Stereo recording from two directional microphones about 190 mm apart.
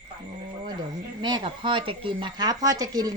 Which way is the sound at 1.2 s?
25° right (ahead or behind).